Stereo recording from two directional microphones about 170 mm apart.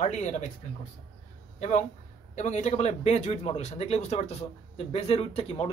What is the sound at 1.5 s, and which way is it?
A man's voice, 45° left (ahead or behind).